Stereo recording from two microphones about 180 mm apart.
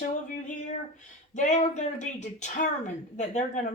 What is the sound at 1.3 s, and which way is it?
A woman's voice, 40° left (ahead or behind).